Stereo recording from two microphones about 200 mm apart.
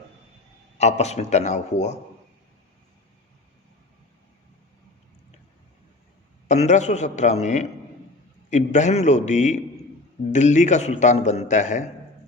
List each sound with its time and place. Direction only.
0.8 s speech: 35° left (ahead or behind)
6.5 s speech: 35° left (ahead or behind)